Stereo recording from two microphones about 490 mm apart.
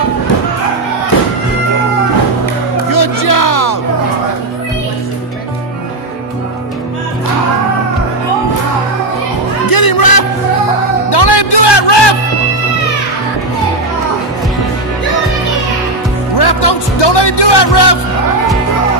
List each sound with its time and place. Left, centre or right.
2.9 s music: left
9.7 s music: left
16.3 s music: left